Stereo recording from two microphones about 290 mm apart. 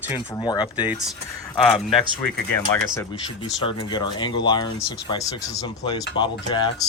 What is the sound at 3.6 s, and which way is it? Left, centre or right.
Speech, centre.